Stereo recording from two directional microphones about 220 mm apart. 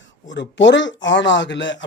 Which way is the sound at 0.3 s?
55° left (ahead or behind).